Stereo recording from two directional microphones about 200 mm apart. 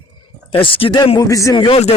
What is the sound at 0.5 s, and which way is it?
Speech, 25° left (ahead or behind).